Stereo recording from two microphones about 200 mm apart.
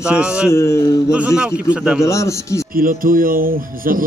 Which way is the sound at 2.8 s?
45° right (ahead or behind).